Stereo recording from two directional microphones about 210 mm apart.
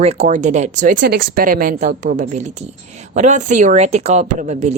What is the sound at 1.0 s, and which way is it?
Speech, 50° right (ahead or behind).